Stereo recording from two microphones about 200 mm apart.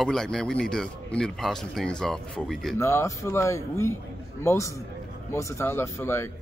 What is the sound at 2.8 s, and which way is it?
A man's voice, 15° left (ahead or behind).